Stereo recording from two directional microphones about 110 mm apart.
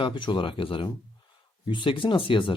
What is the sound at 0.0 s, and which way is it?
Speech, 45° left (ahead or behind).